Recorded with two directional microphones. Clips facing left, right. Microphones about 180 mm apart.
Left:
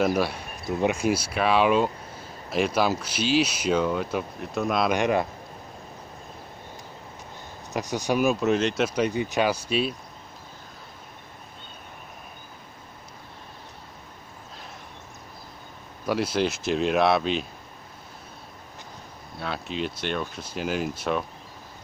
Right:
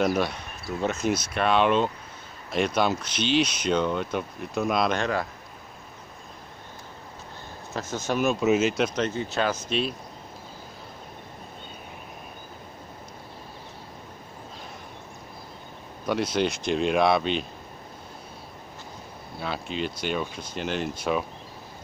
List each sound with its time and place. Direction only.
0.0 s speech: 5° left (ahead or behind)
0.7 s speech: 15° left (ahead or behind); by 4.9 s centre (ahead or behind)
4.9 s speech: 20° left (ahead or behind)
7.7 s speech: 15° left (ahead or behind); by 8.8 s 5° right (ahead or behind)
8.8 s speech: 10° left (ahead or behind)
16.1 s speech: 5° left (ahead or behind)
19.4 s speech: centre (ahead or behind)